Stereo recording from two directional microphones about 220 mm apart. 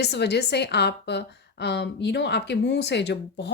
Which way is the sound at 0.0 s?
50° left (ahead or behind).